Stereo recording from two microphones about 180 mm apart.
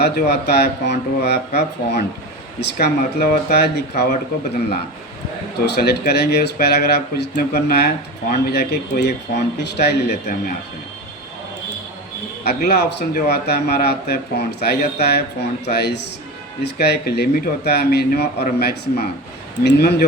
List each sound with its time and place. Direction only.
0.0 s speech: 65° left (ahead or behind)
12.5 s speech: 60° left (ahead or behind)